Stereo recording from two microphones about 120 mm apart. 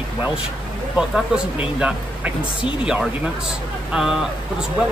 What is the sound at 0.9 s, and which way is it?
Speech, 5° right (ahead or behind).